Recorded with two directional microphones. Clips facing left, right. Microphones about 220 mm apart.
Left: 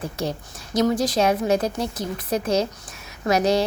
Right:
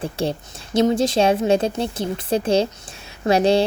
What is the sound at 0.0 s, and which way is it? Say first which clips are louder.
Speech: right 4 dB; 30° right (ahead or behind).